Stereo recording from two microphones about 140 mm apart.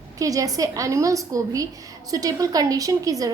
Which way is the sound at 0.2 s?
25° right (ahead or behind).